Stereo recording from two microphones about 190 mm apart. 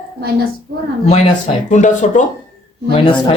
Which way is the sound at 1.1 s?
35° left (ahead or behind).